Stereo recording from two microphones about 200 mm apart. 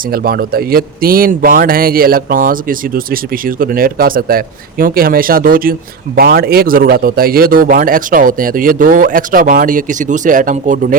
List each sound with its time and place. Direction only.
0.1 s speech: 50° right (ahead or behind)